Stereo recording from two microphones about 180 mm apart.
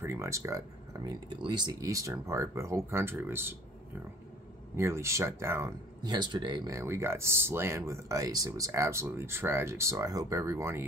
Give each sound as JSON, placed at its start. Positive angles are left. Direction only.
{"t": 0.0, "sound": "speech", "side_deg": -15}
{"t": 4.7, "sound": "speech", "side_deg": -15}